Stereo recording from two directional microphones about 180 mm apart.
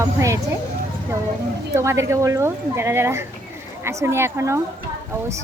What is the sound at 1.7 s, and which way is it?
Speech, 15° right (ahead or behind).